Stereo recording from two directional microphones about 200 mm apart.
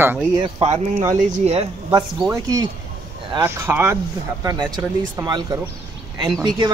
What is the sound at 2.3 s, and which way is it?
Speech, 15° right (ahead or behind).